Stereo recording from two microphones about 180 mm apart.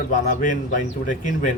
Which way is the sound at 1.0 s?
45° left (ahead or behind).